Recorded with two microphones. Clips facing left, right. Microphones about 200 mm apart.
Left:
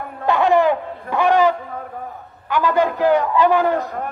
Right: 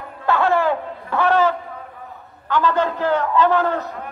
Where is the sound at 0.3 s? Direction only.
15° left (ahead or behind).